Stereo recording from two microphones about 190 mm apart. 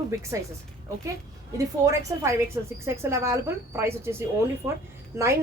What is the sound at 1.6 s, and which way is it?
A woman's voice, 15° right (ahead or behind).